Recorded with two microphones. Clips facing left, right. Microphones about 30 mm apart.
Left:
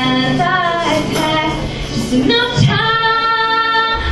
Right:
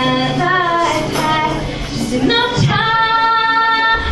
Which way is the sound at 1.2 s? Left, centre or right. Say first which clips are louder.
Even; centre.